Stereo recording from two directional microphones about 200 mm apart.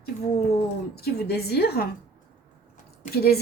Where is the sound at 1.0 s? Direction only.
50° left (ahead or behind).